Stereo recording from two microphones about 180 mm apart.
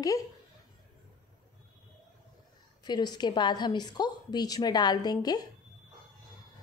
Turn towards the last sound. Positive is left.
turn(degrees=20)  # may be behind; listen again after turning